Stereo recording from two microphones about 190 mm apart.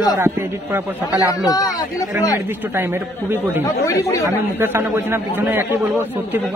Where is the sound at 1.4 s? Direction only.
20° left (ahead or behind).